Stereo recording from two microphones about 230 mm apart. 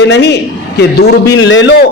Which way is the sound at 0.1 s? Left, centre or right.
Left.